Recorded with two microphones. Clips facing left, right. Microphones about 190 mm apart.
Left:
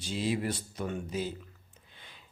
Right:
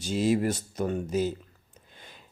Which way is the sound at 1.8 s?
45° right (ahead or behind).